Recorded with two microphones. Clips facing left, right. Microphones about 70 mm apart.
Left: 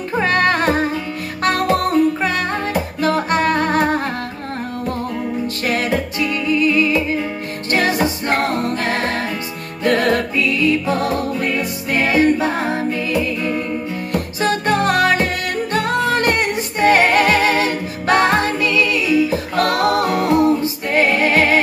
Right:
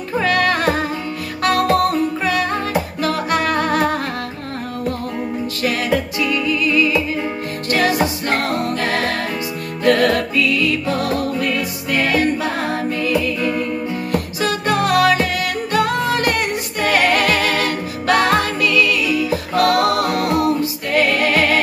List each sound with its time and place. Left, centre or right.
0.2 s music: left
3.0 s music: left
5.6 s music: left
8.3 s music: left
14.4 s music: left